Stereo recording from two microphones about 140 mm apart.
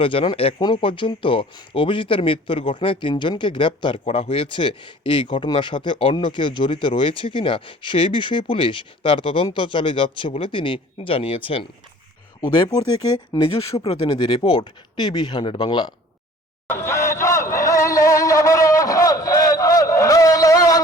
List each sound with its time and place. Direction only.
0.0 s speech: 40° left (ahead or behind)
12.4 s speech: 30° left (ahead or behind)
13.4 s speech: 45° left (ahead or behind)
13.8 s speech: 30° left (ahead or behind)
16.6 s crowd: 20° left (ahead or behind)